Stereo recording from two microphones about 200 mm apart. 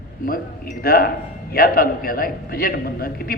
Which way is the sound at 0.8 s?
50° left (ahead or behind).